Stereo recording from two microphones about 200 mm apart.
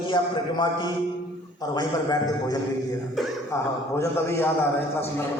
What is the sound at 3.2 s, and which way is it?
Speech, centre (ahead or behind).